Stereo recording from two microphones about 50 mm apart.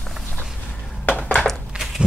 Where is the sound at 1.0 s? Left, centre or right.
Left.